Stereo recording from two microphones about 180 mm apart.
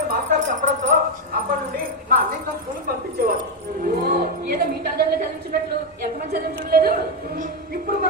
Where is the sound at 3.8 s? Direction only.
50° right (ahead or behind).